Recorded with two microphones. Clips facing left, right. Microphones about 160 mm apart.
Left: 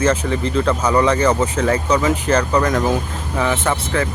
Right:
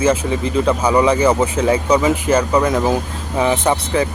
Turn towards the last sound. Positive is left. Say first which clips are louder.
# right 3 dB
turn(degrees=-15)  # may be behind; listen again after turning